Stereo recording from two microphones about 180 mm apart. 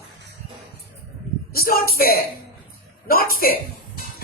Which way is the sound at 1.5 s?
55° left (ahead or behind).